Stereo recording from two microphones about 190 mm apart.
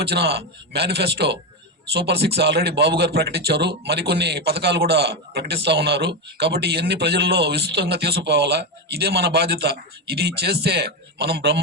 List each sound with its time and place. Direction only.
0.0 s a man's voice: 60° right (ahead or behind)